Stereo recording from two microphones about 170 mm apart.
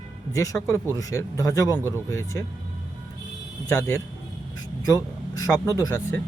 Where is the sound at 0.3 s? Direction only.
20° left (ahead or behind).